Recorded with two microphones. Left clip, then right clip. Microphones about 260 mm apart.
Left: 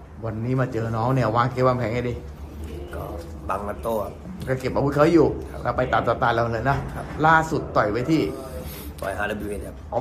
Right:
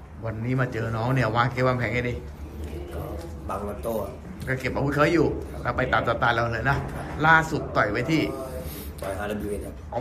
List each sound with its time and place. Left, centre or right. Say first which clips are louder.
0.2 s a man's voice: left 2 dB; centre
3.4 s a man's voice: left 4 dB; centre
4.5 s a man's voice: left 3 dB; centre
8.3 s a sound: even; centre